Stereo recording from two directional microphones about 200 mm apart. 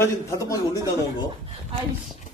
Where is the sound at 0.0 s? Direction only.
15° left (ahead or behind).